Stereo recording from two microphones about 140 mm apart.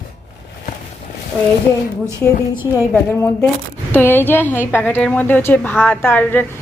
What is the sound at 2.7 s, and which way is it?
A woman's voice, 20° left (ahead or behind).